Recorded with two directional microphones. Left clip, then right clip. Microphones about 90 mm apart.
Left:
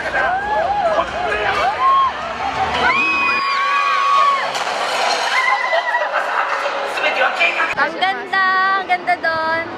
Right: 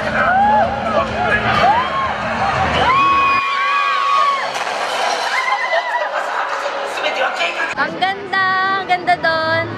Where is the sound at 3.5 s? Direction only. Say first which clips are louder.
Even; 15° left (ahead or behind).